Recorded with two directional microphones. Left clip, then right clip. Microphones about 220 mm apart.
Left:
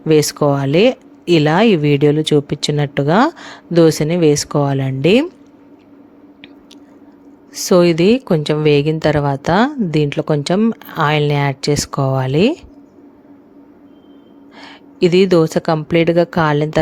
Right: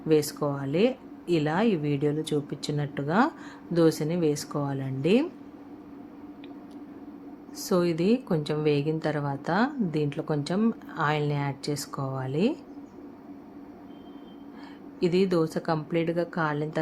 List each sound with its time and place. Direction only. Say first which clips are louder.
0.1 s speech: left 12 dB; 40° left (ahead or behind)
7.5 s speech: left 14 dB; 40° left (ahead or behind)
14.6 s speech: left 13 dB; 40° left (ahead or behind)